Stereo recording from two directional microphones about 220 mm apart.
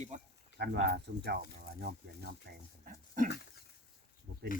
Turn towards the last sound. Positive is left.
turn(degrees=-40)  # may be behind; listen again after turning